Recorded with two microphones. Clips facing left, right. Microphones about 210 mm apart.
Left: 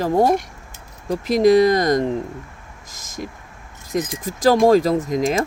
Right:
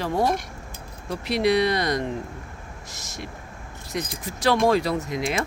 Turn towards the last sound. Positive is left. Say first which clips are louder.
# left 7 dB
turn(degrees=40)  # may be behind; listen again after turning